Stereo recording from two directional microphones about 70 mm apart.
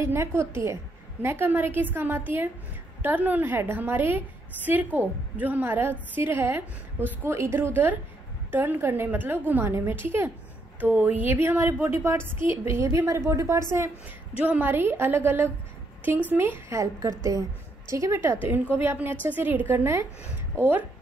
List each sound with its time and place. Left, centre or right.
0.0 s a woman's voice: right
7.7 s a woman's voice: right
14.4 s a woman's voice: right
17.2 s a woman's voice: right
18.2 s a woman's voice: right